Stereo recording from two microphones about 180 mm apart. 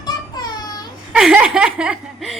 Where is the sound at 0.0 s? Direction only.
20° left (ahead or behind).